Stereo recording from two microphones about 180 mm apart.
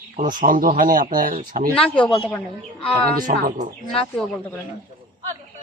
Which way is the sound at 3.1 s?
45° right (ahead or behind).